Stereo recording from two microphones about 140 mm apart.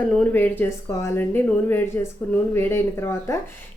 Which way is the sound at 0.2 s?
10° left (ahead or behind).